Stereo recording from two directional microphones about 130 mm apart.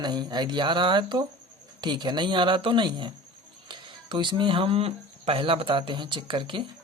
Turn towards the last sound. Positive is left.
turn(degrees=-40)  # may be behind; listen again after turning